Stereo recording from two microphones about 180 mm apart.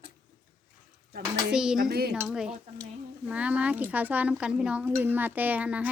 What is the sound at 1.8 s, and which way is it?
Speech, 60° right (ahead or behind).